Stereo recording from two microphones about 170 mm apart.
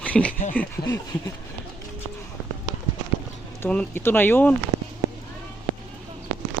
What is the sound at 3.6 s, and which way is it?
Speech, 10° left (ahead or behind).